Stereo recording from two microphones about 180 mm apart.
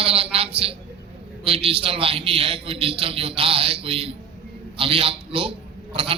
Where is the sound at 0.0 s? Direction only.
30° right (ahead or behind).